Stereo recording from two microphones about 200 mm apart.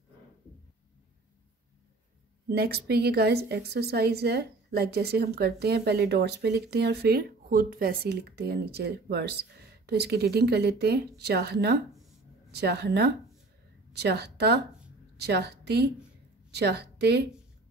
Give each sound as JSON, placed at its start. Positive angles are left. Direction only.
{"t": 2.4, "sound": "a woman's voice", "side_deg": -50}